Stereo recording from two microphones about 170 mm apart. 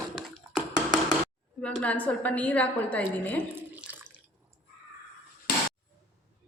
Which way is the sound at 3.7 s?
10° right (ahead or behind).